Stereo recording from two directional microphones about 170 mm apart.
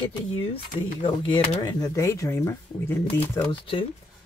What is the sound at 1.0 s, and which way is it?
Speech, 25° left (ahead or behind).